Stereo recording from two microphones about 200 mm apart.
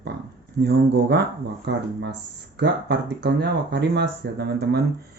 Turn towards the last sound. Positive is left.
turn(degrees=-55)  # may be behind; listen again after turning